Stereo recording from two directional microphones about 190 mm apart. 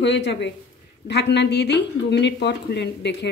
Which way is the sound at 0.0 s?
65° left (ahead or behind).